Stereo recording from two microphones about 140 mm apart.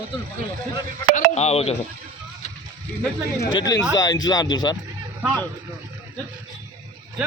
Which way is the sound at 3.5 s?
25° left (ahead or behind).